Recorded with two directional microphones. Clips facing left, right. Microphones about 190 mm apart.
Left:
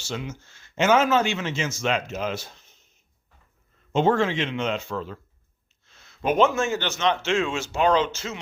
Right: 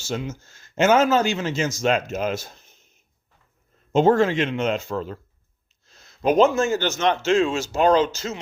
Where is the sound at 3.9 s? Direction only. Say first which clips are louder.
Right 4 dB; 40° right (ahead or behind).